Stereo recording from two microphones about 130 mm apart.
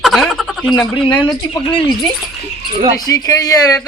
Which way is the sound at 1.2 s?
35° left (ahead or behind).